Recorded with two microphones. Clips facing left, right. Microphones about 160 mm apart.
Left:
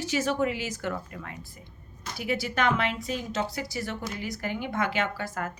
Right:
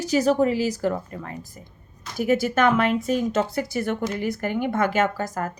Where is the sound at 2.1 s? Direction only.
50° right (ahead or behind).